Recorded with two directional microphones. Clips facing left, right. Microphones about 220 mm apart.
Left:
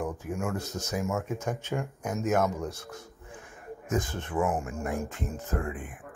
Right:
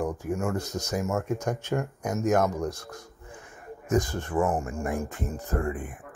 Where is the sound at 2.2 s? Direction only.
15° right (ahead or behind).